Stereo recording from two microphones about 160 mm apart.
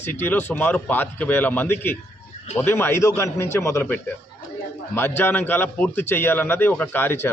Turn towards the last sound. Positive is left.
turn(degrees=15)  # may be behind; listen again after turning